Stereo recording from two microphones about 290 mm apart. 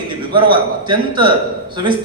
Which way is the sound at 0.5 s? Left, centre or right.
Centre.